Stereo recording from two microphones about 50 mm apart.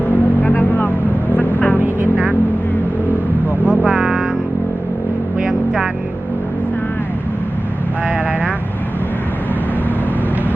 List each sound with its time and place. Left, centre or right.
0.1 s vehicle: left
2.1 s vehicle: right
3.6 s music: left
3.8 s music: centre
5.5 s music: centre